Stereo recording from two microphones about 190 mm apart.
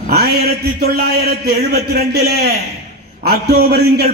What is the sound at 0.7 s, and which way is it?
A man's voice, 55° right (ahead or behind).